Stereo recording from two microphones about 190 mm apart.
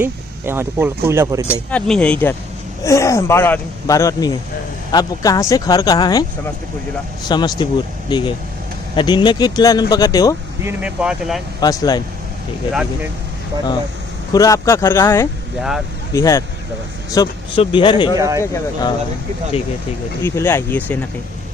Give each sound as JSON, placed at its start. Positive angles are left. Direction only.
{"t": 0.0, "sound": "speech", "side_deg": -10}
{"t": 1.7, "sound": "speech", "side_deg": 5}
{"t": 7.3, "sound": "speech", "side_deg": 25}
{"t": 10.6, "sound": "speech", "side_deg": -10}
{"t": 11.6, "sound": "speech", "side_deg": 20}
{"t": 14.3, "sound": "speech", "side_deg": 15}
{"t": 18.2, "sound": "speech", "side_deg": -15}
{"t": 18.5, "sound": "speech", "side_deg": 20}
{"t": 20.2, "sound": "speech", "side_deg": 10}